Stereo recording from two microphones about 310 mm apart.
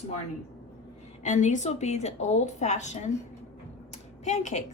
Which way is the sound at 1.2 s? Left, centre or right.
Left.